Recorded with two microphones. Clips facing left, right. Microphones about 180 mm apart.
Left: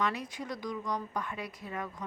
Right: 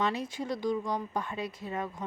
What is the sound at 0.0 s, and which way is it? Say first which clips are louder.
Speech: right 3 dB; 25° right (ahead or behind).